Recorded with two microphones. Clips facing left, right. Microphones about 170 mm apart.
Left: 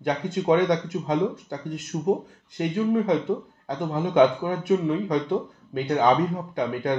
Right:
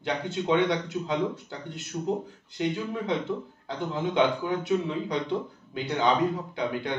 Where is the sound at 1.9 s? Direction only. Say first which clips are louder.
Left 5 dB; 50° left (ahead or behind).